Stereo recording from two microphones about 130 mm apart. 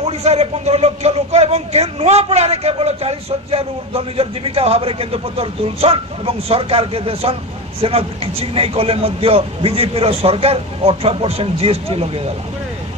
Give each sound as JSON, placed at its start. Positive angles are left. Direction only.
{"t": 0.0, "sound": "a man's voice", "side_deg": -55}